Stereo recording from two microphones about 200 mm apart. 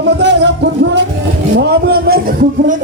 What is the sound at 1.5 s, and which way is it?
Speech, 55° right (ahead or behind).